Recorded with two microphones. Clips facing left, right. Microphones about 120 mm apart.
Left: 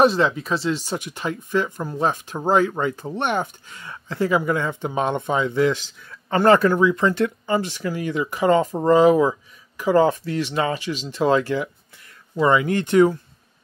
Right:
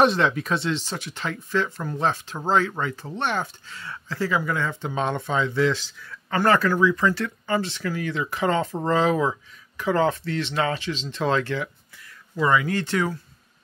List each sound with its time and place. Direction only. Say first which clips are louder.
0.0 s speech: left 2 dB; 5° left (ahead or behind)
12.4 s speech: left 3 dB; 25° left (ahead or behind)